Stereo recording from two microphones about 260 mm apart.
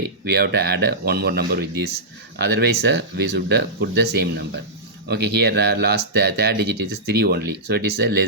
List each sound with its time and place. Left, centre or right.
0.3 s speech: right